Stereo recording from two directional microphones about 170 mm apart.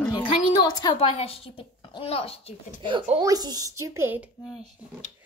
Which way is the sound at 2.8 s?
30° right (ahead or behind).